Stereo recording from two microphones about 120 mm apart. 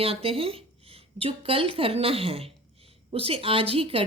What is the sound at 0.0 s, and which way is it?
A woman's voice, 50° right (ahead or behind).